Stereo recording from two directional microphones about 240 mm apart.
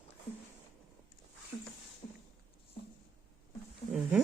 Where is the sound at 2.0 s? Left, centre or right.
Left.